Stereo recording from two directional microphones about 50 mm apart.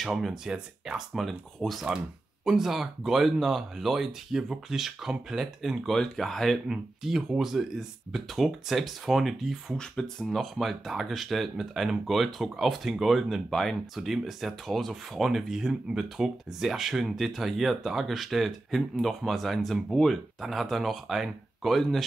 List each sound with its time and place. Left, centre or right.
0.0 s speech: centre
0.5 s speech: centre
1.1 s speech: centre
5.9 s speech: centre
6.7 s speech: centre
9.8 s speech: centre
10.2 s speech: centre